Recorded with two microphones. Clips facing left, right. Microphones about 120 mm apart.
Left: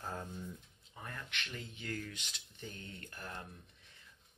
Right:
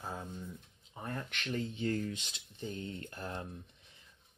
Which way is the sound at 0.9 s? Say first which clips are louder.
Right 6 dB; 30° right (ahead or behind).